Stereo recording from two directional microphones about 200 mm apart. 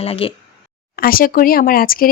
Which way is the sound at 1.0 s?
45° left (ahead or behind).